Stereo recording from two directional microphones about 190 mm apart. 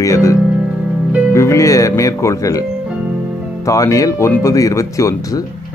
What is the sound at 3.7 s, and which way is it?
A man's voice, 15° left (ahead or behind).